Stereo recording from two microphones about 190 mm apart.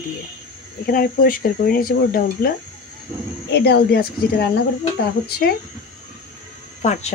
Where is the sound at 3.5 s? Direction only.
55° left (ahead or behind).